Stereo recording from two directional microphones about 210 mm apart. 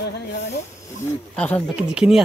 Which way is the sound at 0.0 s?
55° left (ahead or behind).